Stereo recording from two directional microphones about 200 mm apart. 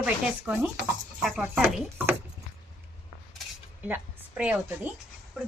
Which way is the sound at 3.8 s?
5° right (ahead or behind).